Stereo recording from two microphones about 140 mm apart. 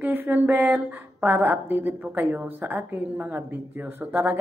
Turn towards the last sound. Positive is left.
turn(degrees=-15)  # may be behind; listen again after turning